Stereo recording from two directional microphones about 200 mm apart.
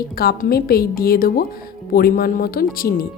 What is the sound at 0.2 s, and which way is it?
A woman's voice, 50° left (ahead or behind).